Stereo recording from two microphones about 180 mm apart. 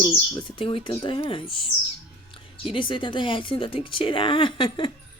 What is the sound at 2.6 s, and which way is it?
Speech, 30° left (ahead or behind).